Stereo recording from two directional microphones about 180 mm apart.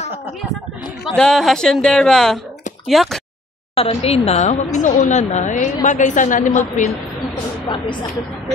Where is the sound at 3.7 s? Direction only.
35° left (ahead or behind).